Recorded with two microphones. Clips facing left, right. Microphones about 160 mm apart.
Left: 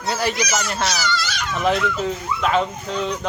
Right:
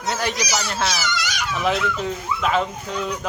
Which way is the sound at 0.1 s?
Centre (ahead or behind).